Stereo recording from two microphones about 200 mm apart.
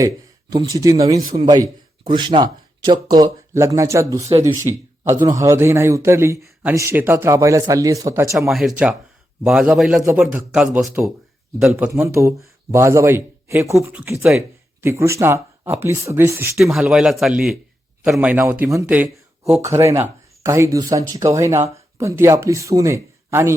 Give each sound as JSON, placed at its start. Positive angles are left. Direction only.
{"t": 0.5, "sound": "a man's voice", "side_deg": -20}
{"t": 8.4, "sound": "a man's voice", "side_deg": 0}